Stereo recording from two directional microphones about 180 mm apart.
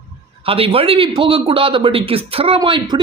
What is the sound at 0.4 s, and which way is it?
A man's voice, 30° right (ahead or behind).